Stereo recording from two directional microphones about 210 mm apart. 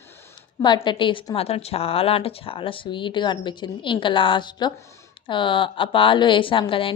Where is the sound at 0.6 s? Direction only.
20° left (ahead or behind).